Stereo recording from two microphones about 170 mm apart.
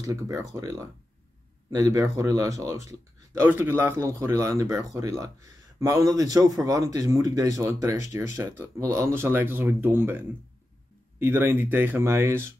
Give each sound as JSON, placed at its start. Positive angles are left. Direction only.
{"t": 0.0, "sound": "speech", "side_deg": -20}